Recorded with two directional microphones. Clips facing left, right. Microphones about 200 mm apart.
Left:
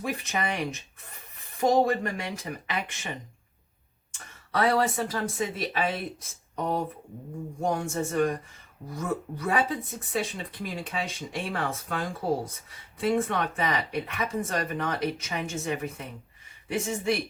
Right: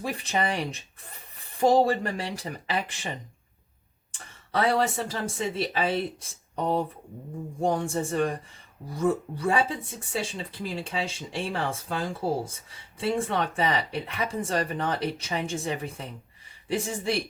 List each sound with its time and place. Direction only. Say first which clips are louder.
0.0 s speech: right 2 dB; 30° right (ahead or behind)